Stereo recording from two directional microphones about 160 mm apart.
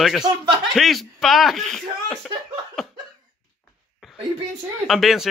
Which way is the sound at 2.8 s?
Centre (ahead or behind).